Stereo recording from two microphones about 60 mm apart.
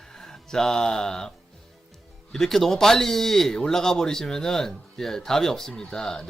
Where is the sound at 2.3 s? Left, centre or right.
Centre.